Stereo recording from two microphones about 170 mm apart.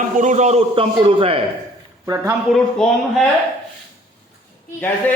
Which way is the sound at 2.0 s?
20° right (ahead or behind).